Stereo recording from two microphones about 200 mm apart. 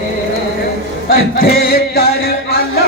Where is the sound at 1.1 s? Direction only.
45° left (ahead or behind).